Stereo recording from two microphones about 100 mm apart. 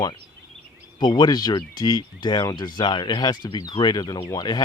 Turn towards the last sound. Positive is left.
turn(degrees=40)  # may be behind; listen again after turning